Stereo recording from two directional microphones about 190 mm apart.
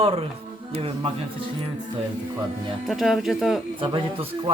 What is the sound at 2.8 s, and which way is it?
Speech, centre (ahead or behind).